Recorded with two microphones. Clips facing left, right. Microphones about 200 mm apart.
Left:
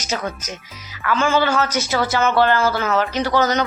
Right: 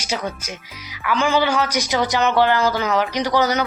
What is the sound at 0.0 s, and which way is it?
Speech, 10° right (ahead or behind).